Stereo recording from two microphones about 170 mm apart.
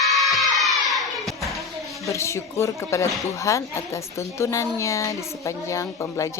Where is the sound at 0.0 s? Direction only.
Centre (ahead or behind).